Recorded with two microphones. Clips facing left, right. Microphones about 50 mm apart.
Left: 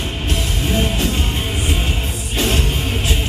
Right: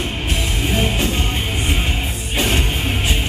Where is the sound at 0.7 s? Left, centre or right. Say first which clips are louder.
Left 1 dB; centre.